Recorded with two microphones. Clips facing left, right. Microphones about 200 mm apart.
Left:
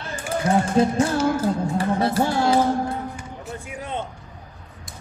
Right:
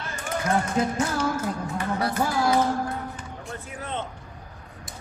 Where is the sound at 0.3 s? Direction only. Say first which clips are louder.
Left 5 dB; 30° left (ahead or behind).